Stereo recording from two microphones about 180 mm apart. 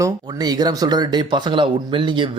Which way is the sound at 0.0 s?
20° right (ahead or behind).